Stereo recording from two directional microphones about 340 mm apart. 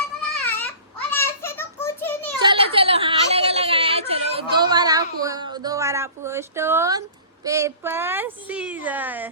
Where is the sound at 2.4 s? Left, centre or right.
Centre.